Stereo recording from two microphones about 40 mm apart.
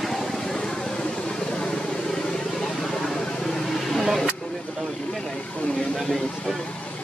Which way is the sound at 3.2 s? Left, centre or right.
Centre.